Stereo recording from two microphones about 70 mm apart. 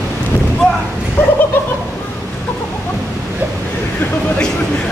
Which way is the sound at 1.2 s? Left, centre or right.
Left.